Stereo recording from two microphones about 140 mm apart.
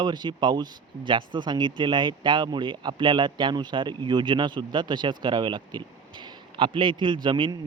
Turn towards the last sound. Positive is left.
turn(degrees=-35)  # may be behind; listen again after turning